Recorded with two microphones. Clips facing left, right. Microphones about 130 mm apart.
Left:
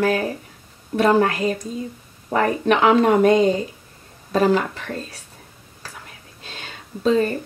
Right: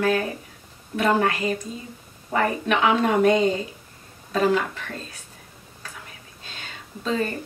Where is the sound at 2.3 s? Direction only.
40° left (ahead or behind).